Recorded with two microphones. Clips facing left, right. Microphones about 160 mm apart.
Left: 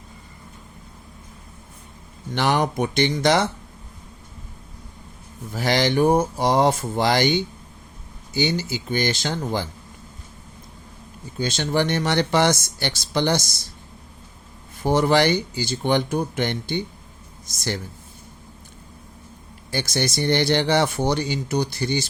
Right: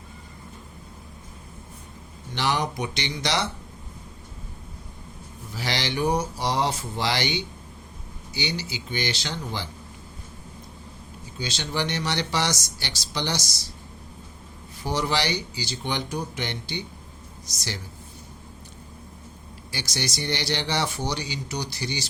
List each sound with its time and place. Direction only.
2.3 s speech: 50° left (ahead or behind)
5.5 s speech: 50° left (ahead or behind)
11.3 s speech: 50° left (ahead or behind)
14.8 s speech: 55° left (ahead or behind)
19.7 s speech: 55° left (ahead or behind)